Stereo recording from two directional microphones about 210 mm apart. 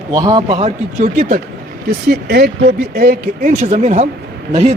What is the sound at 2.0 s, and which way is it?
A man's voice, 50° right (ahead or behind).